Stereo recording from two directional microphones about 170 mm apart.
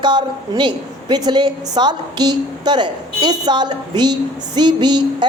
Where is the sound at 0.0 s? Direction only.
25° right (ahead or behind).